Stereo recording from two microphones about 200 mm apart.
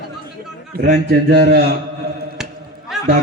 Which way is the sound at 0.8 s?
50° right (ahead or behind).